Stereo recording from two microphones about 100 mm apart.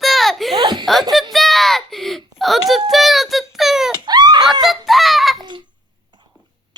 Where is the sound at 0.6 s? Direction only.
50° right (ahead or behind).